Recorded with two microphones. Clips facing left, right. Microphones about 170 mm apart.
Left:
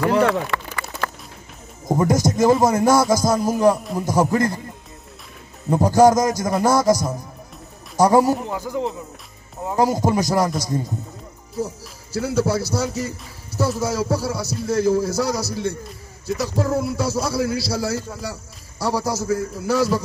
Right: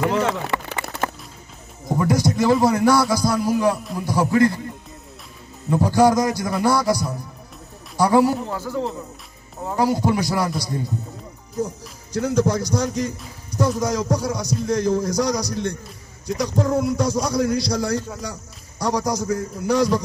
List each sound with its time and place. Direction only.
0.5 s a sound: 20° right (ahead or behind)
1.9 s a man's voice: 45° left (ahead or behind)
5.7 s a man's voice: 45° left (ahead or behind)
8.5 s speech: 15° left (ahead or behind)
9.8 s a man's voice: 45° left (ahead or behind)
11.6 s a man's voice: 5° left (ahead or behind)